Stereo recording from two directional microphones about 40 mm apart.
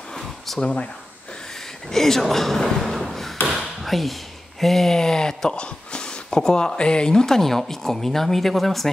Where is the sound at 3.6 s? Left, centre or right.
Centre.